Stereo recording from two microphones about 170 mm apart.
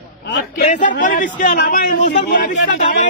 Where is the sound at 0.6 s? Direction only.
45° left (ahead or behind).